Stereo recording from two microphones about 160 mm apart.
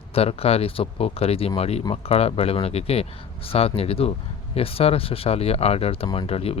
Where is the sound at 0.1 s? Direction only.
40° left (ahead or behind).